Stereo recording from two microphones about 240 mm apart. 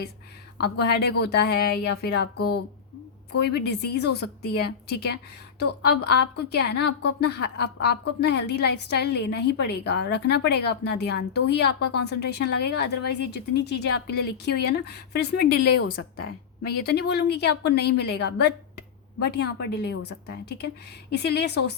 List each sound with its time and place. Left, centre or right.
0.6 s speech: left
15.6 s a woman's voice: left
16.6 s speech: left